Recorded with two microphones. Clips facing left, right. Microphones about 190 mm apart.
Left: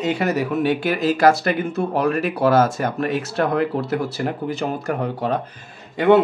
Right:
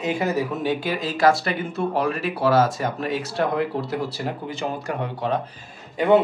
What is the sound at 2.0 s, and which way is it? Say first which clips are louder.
Speech: left 5 dB; 50° left (ahead or behind).